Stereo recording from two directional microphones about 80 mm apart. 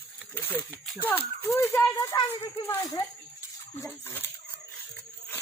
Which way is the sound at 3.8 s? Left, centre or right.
Left.